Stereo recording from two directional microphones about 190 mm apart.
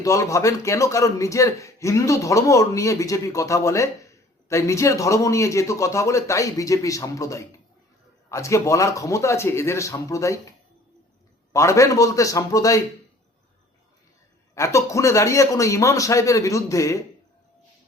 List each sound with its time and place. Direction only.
0.0 s a man's voice: 15° left (ahead or behind)
11.5 s a man's voice: 15° left (ahead or behind)
14.5 s a man's voice: 15° left (ahead or behind)